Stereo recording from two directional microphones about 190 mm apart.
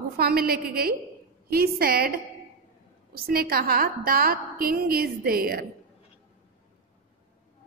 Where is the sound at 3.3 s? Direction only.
50° right (ahead or behind).